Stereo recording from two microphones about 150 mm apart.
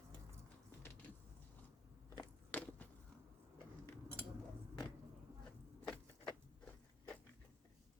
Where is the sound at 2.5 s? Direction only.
10° left (ahead or behind).